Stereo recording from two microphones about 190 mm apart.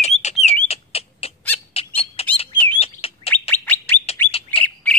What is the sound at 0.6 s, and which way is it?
Bird, 30° left (ahead or behind).